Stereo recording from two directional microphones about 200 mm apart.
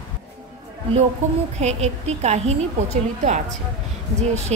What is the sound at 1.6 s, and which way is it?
A woman's voice, 35° right (ahead or behind).